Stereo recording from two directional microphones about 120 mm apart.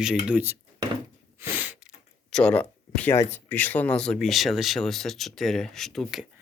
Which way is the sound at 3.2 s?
15° left (ahead or behind).